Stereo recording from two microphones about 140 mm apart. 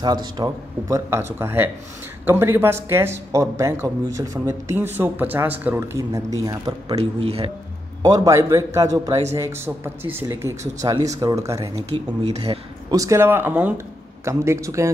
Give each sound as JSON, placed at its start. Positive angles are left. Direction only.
{"t": 0.0, "sound": "a man's voice", "side_deg": -30}
{"t": 0.8, "sound": "speech", "side_deg": -20}
{"t": 7.0, "sound": "speech", "side_deg": -45}
{"t": 8.0, "sound": "speech", "side_deg": -25}
{"t": 11.7, "sound": "speech", "side_deg": -50}
{"t": 12.9, "sound": "speech", "side_deg": -20}